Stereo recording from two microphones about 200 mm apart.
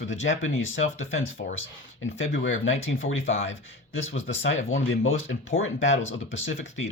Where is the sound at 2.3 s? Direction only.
75° left (ahead or behind).